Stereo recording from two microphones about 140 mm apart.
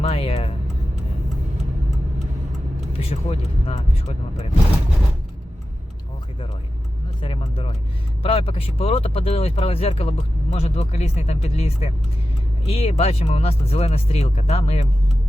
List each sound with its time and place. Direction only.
0.0 s music: 40° left (ahead or behind)
3.0 s speech: 45° left (ahead or behind)
7.2 s speech: 40° left (ahead or behind)